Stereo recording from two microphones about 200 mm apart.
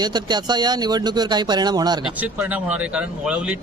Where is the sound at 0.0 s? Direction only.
20° right (ahead or behind).